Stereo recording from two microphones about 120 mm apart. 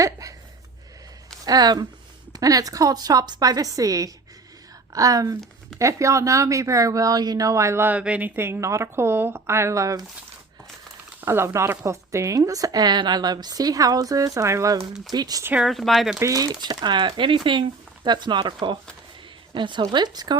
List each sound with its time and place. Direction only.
0.0 s a sound: 30° right (ahead or behind)
1.5 s speech: 35° right (ahead or behind)
11.2 s speech: 20° right (ahead or behind)
15.6 s speech: centre (ahead or behind)
16.2 s speech: 30° right (ahead or behind)